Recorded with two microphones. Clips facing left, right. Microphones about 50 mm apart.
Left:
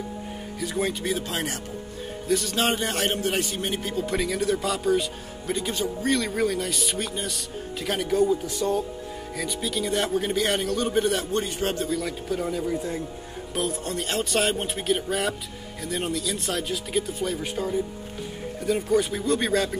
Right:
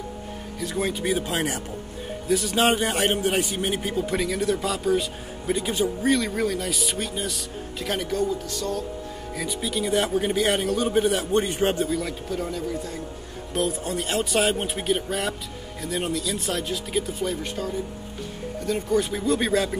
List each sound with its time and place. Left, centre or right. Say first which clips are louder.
0.6 s speech: even; centre
1.0 s a man's voice: right 3 dB; centre
8.2 s a man's voice: left 3 dB; centre
9.3 s speech: right 1 dB; centre
11.3 s speech: right 4 dB; right
11.8 s speech: right 2 dB; centre